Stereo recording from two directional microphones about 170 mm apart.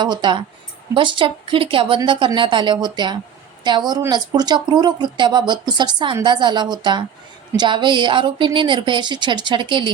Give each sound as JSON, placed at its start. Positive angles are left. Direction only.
{"t": 0.0, "sound": "speech", "side_deg": -25}